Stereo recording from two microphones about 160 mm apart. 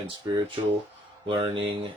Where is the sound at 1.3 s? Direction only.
30° right (ahead or behind).